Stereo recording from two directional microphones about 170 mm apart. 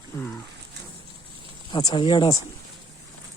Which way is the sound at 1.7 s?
25° left (ahead or behind).